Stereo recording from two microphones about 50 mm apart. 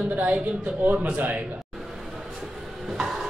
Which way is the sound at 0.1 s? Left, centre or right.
Right.